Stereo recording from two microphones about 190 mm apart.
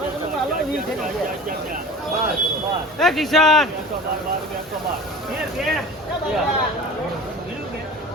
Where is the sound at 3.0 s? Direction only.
Centre (ahead or behind).